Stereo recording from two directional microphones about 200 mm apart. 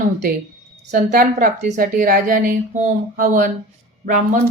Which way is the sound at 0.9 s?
40° right (ahead or behind).